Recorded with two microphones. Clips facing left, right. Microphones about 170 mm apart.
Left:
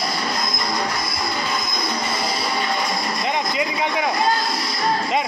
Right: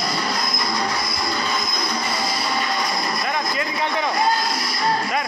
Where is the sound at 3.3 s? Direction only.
15° left (ahead or behind).